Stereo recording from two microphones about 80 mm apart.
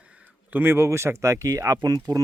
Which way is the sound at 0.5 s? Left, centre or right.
Right.